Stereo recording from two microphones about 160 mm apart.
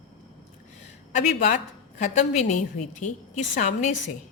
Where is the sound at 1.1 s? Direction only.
50° left (ahead or behind).